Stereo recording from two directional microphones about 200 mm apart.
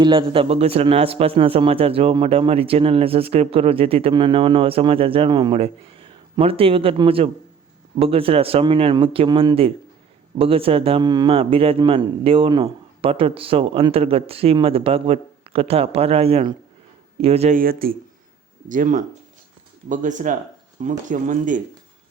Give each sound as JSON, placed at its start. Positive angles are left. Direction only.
{"t": 0.0, "sound": "a man's voice", "side_deg": -25}
{"t": 17.6, "sound": "speech", "side_deg": -45}